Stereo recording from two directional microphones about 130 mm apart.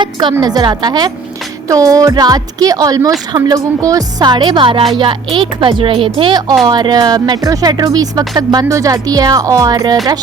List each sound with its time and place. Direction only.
0.0 s speech: 40° right (ahead or behind)